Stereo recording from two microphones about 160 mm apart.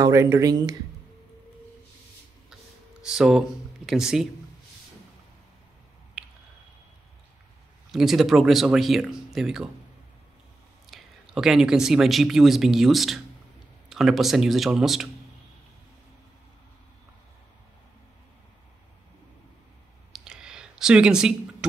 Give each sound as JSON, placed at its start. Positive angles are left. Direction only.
{"t": 0.0, "sound": "speech", "side_deg": -20}
{"t": 3.0, "sound": "speech", "side_deg": -5}
{"t": 7.9, "sound": "speech", "side_deg": 0}
{"t": 10.9, "sound": "speech", "side_deg": 0}
{"t": 20.1, "sound": "a sound", "side_deg": -5}